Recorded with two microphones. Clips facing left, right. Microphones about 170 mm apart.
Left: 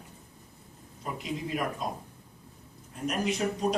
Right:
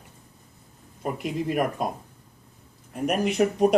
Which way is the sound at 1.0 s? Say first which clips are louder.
Right 7 dB; 55° right (ahead or behind).